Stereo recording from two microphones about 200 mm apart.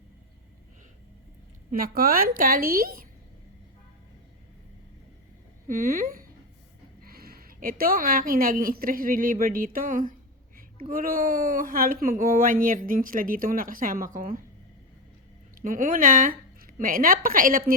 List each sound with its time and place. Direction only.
1.7 s speech: 45° right (ahead or behind)
5.6 s a woman's voice: 45° right (ahead or behind)
15.5 s a woman's voice: 40° right (ahead or behind)